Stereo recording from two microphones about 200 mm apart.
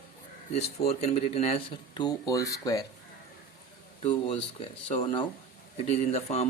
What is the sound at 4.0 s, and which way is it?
Speech, 25° left (ahead or behind).